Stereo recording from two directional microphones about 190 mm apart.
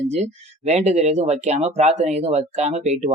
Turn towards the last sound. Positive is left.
turn(degrees=-35)  # may be behind; listen again after turning